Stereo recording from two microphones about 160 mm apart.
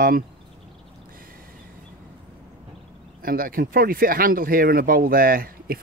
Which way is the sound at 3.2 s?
65° right (ahead or behind).